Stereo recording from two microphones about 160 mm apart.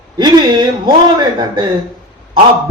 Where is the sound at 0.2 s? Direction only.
30° right (ahead or behind).